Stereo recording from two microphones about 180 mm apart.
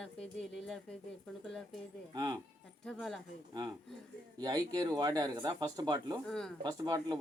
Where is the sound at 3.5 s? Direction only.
25° right (ahead or behind).